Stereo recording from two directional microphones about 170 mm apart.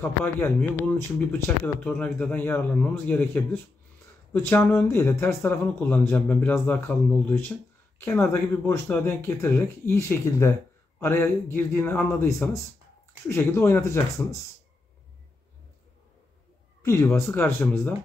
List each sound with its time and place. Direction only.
0.0 s speech: 10° left (ahead or behind)
16.8 s speech: 15° left (ahead or behind)